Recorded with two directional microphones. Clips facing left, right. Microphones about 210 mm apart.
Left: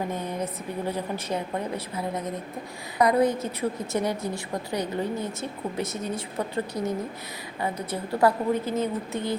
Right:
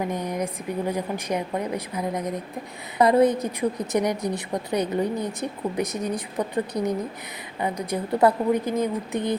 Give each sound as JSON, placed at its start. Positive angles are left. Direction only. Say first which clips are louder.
{"t": 0.1, "sound": "a woman's voice", "louder": "right 3 dB", "side_deg": -15}